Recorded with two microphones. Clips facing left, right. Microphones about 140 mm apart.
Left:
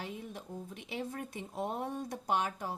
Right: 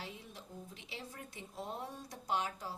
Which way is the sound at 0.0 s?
55° left (ahead or behind).